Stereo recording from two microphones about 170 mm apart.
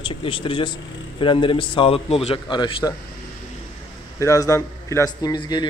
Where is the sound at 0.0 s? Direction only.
30° left (ahead or behind).